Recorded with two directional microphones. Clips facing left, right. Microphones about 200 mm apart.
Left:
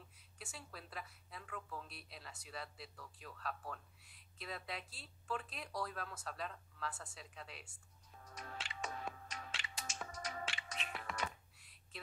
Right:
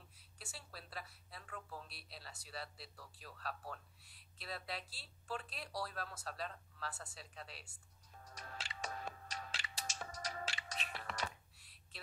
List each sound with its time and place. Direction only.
0.4 s a woman's voice: 35° right (ahead or behind)
8.4 s music: 35° right (ahead or behind)